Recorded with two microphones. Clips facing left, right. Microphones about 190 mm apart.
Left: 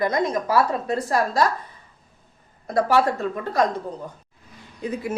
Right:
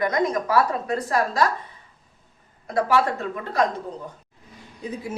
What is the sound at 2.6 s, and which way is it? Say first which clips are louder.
Speech: left 1 dB; 40° left (ahead or behind).